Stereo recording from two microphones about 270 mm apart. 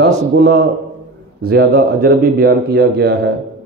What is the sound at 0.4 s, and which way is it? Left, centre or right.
A man's voice, right.